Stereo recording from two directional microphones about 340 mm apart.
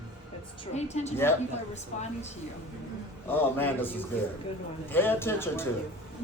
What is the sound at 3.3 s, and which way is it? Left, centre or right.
A man's voice, centre.